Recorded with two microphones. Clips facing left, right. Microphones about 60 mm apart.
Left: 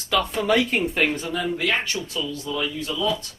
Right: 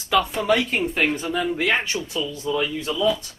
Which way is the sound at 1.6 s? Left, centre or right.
Right.